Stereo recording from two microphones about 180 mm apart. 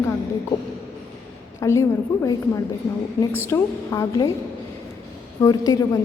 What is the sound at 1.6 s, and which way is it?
A woman's voice, 15° left (ahead or behind).